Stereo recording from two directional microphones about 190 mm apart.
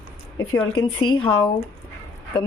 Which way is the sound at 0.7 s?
25° left (ahead or behind).